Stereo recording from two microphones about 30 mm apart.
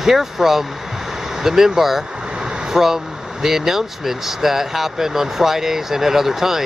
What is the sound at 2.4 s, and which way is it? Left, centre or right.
Vehicle, right.